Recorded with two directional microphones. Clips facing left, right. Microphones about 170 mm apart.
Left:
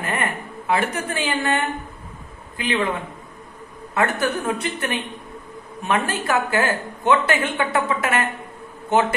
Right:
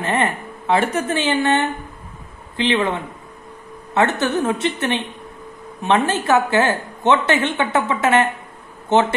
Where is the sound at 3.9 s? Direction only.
25° right (ahead or behind).